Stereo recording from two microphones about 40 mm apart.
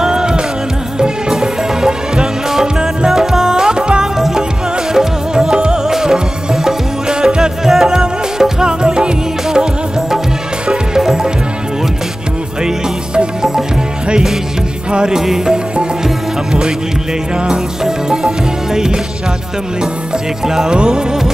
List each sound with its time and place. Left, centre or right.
0.0 s music: centre
12.6 s music: centre
14.9 s music: right
15.1 s music: centre
17.8 s music: centre
20.4 s music: centre